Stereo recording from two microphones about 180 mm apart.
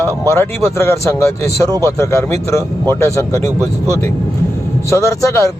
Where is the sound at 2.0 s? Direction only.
15° left (ahead or behind).